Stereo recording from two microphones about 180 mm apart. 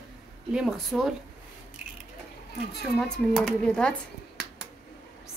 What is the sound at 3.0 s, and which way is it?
Speech, 5° left (ahead or behind).